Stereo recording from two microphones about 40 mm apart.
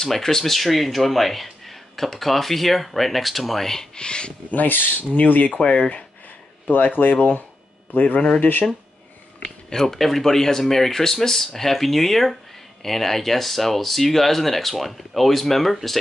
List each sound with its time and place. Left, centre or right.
0.0 s speech: centre
3.9 s speech: left
4.5 s speech: left
5.1 s speech: left
5.5 s speech: left
7.0 s speech: left
9.4 s speech: centre